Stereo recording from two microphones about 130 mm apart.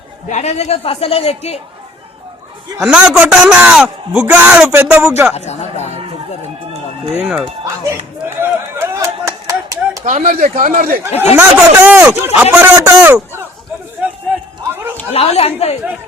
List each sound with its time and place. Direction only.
0.3 s a man's voice: 60° left (ahead or behind)
2.7 s a man's voice: 10° right (ahead or behind)
5.3 s speech: 60° left (ahead or behind)
7.1 s a man's voice: 15° right (ahead or behind)
8.4 s a sound: 20° right (ahead or behind)
10.1 s speech: 75° right (ahead or behind)
11.2 s a man's voice: 15° right (ahead or behind)
15.1 s a man's voice: 50° left (ahead or behind)